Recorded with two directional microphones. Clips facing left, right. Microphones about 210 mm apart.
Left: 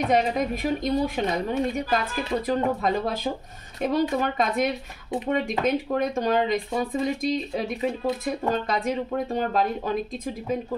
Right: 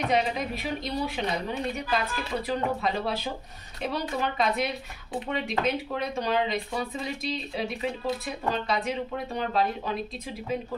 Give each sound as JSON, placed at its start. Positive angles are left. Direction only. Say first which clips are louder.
{"t": 0.1, "sound": "speech", "louder": "left 5 dB", "side_deg": 45}